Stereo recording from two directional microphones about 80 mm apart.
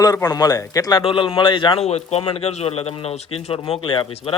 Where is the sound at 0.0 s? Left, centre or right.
Left.